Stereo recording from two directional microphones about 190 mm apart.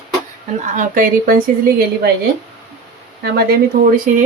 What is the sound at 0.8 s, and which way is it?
Speech, 45° right (ahead or behind).